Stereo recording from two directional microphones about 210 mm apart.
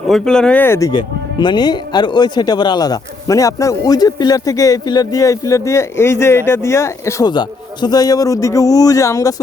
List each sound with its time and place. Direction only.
0.1 s speech: 5° left (ahead or behind)